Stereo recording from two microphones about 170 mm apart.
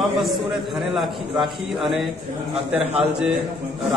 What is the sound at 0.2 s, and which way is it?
A man's voice, centre (ahead or behind).